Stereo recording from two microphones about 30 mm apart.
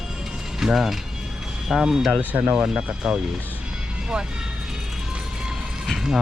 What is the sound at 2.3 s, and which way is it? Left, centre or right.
Speech, right.